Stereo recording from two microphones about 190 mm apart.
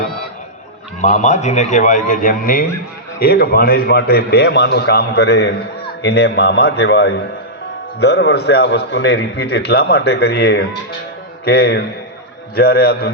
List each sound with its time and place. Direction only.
1.0 s a man's voice: 40° left (ahead or behind); by 13.1 s 55° left (ahead or behind)